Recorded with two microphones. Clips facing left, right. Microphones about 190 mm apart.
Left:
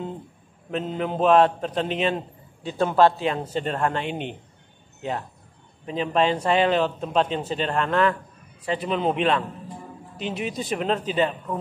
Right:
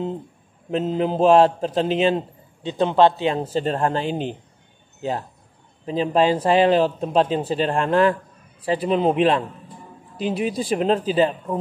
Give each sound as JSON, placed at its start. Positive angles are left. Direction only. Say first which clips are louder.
{"t": 0.7, "sound": "a man's voice", "louder": "right 5 dB", "side_deg": -30}
{"t": 5.9, "sound": "a man's voice", "louder": "right 4 dB", "side_deg": -30}